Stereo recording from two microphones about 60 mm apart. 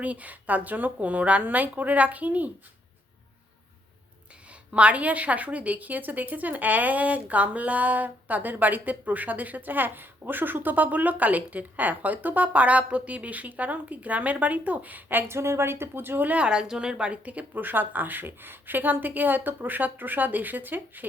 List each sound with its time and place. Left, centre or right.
0.0 s a woman's voice: right
4.7 s a woman's voice: right
15.3 s speech: right